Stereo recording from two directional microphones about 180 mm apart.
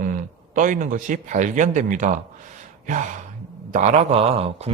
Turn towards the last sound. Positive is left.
turn(degrees=-35)  # may be behind; listen again after turning